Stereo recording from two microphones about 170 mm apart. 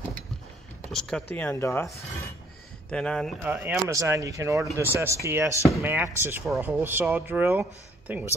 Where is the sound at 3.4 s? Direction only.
10° right (ahead or behind).